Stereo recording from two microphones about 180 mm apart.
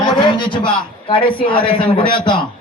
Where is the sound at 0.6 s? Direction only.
30° left (ahead or behind).